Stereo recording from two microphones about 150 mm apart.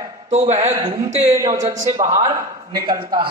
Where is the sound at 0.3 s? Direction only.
50° right (ahead or behind).